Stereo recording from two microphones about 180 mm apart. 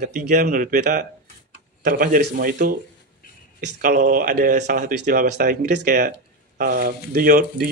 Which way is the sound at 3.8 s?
50° right (ahead or behind).